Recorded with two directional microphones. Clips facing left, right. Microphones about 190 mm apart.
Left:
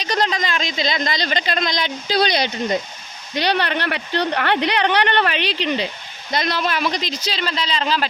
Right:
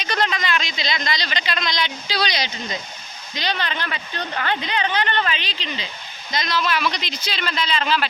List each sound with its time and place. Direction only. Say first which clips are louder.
0.0 s speech: left 2 dB; 35° left (ahead or behind)